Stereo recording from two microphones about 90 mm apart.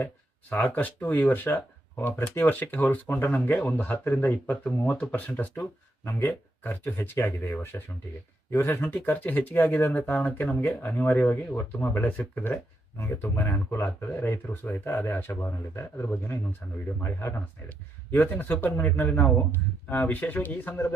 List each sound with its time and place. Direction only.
0.5 s speech: 15° left (ahead or behind)